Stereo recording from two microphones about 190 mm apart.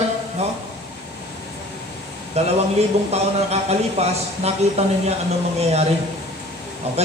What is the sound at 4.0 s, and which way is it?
A man's voice, 35° right (ahead or behind).